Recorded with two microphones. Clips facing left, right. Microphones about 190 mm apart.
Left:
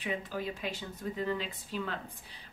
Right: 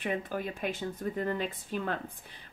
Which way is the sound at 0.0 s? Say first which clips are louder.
Right 3 dB; 55° right (ahead or behind).